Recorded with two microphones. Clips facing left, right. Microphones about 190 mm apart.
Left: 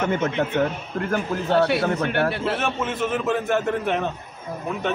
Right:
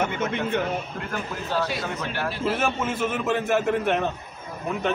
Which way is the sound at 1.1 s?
65° left (ahead or behind).